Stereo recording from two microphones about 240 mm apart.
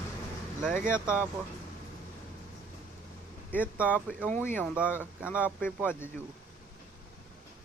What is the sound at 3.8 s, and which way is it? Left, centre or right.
Speech, centre.